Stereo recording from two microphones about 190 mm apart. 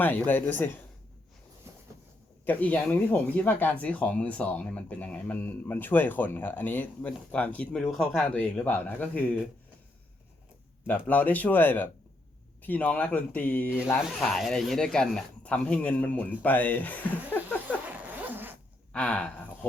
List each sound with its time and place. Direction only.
0.0 s speech: 10° left (ahead or behind)
2.4 s speech: 10° left (ahead or behind)
10.8 s speech: 10° left (ahead or behind)
17.7 s zipper: 10° right (ahead or behind)
18.9 s speech: 5° left (ahead or behind)